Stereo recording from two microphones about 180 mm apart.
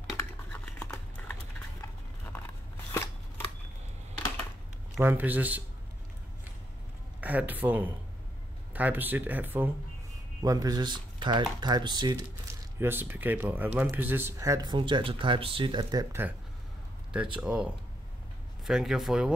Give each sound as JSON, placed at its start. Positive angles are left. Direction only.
{"t": 0.2, "sound": "typing", "side_deg": 10}
{"t": 5.0, "sound": "speech", "side_deg": -10}
{"t": 7.2, "sound": "speech", "side_deg": -10}
{"t": 12.7, "sound": "speech", "side_deg": -10}
{"t": 18.7, "sound": "speech", "side_deg": 0}